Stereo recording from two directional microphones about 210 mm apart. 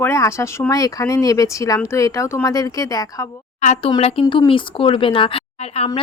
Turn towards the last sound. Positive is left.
turn(degrees=25)  # may be behind; listen again after turning